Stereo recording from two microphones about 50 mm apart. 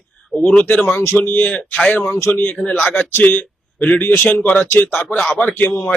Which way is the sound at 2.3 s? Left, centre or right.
Left.